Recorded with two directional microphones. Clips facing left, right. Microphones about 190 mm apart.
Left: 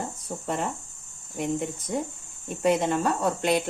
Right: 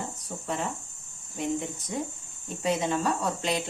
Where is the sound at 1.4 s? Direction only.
55° left (ahead or behind).